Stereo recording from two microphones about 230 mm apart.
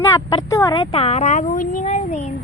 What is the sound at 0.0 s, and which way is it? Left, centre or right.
A woman's voice, centre.